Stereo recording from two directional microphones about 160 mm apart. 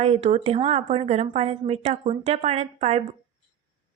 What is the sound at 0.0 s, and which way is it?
A woman's voice, 40° right (ahead or behind).